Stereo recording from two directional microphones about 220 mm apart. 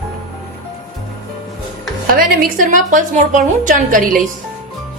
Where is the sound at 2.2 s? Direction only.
35° right (ahead or behind).